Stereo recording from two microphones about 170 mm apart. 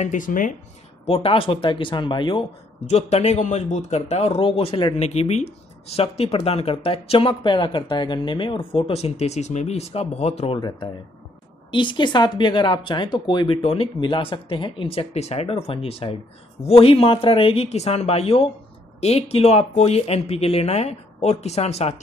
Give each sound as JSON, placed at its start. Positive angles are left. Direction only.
{"t": 0.0, "sound": "speech", "side_deg": 50}
{"t": 1.0, "sound": "speech", "side_deg": 35}
{"t": 2.9, "sound": "speech", "side_deg": 40}